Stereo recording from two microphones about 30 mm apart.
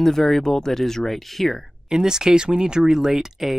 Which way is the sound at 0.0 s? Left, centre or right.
Centre.